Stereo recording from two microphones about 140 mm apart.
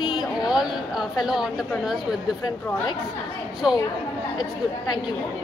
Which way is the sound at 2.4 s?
35° left (ahead or behind).